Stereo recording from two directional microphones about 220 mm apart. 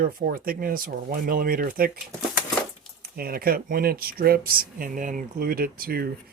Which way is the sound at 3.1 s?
40° right (ahead or behind).